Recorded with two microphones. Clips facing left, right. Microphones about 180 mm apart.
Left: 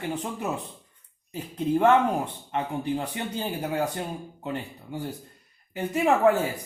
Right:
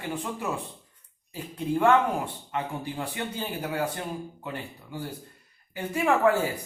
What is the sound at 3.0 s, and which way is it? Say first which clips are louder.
Speech: left 2 dB; 25° left (ahead or behind).